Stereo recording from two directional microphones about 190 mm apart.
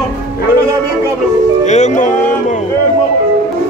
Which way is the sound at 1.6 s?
40° left (ahead or behind).